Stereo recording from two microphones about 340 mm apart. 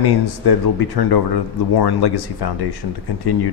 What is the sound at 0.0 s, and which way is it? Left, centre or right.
Speech, left.